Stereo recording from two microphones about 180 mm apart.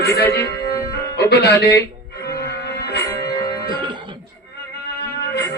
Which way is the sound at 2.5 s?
60° left (ahead or behind).